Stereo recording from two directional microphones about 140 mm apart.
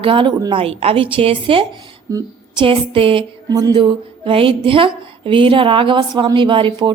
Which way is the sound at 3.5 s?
25° right (ahead or behind).